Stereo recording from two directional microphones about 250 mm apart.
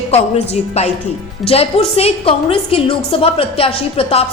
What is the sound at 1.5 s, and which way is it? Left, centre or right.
A woman's voice, left.